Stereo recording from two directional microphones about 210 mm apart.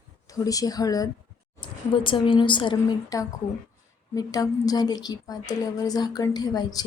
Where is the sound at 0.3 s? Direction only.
15° left (ahead or behind).